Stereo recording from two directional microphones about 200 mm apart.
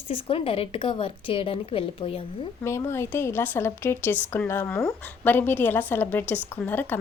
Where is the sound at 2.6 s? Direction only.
15° left (ahead or behind).